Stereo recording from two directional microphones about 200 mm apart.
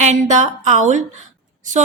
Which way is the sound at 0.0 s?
35° right (ahead or behind).